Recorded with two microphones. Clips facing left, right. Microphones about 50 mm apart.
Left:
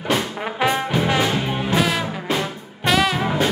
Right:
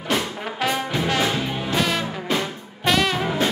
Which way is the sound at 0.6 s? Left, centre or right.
Centre.